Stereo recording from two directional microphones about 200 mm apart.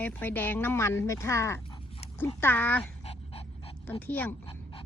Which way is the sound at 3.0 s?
30° left (ahead or behind).